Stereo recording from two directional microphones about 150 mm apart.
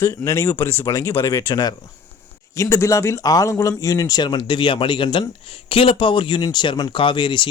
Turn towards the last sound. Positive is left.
turn(degrees=30)  # may be behind; listen again after turning